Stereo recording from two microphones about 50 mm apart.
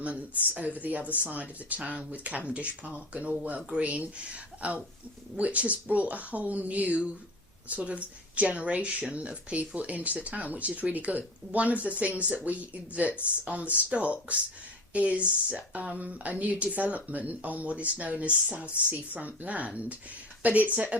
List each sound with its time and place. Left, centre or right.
0.0 s speech: right